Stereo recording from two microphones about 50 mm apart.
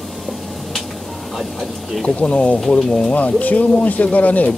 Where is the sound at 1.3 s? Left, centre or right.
Centre.